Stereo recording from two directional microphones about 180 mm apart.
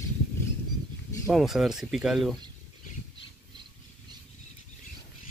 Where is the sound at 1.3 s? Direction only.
Centre (ahead or behind).